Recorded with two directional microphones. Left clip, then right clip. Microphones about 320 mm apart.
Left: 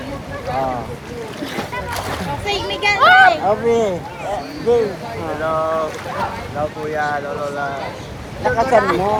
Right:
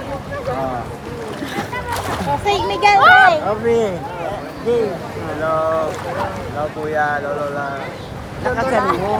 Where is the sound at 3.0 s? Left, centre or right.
Centre.